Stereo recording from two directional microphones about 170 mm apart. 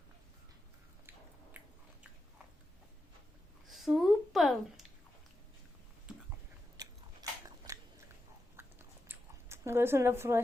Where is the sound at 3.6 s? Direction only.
Centre (ahead or behind).